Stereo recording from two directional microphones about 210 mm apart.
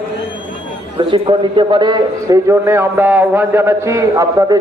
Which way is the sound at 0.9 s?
25° right (ahead or behind).